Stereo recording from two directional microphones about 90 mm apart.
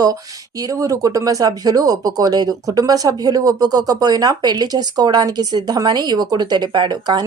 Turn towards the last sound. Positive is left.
turn(degrees=-55)  # may be behind; listen again after turning